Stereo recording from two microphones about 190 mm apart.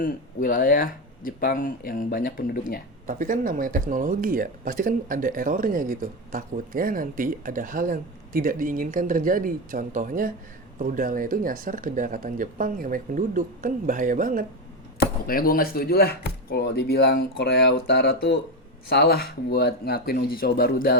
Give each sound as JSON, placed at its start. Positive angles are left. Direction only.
{"t": 0.0, "sound": "speech", "side_deg": 45}
{"t": 3.1, "sound": "speech", "side_deg": -45}
{"t": 14.9, "sound": "speech", "side_deg": 50}